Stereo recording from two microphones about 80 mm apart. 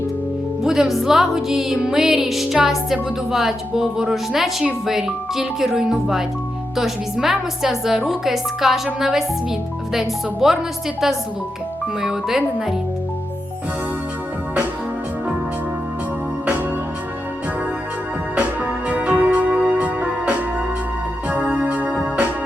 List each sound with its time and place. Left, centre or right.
0.6 s music: centre
12.0 s music: centre
18.3 s music: centre
21.2 s organ: centre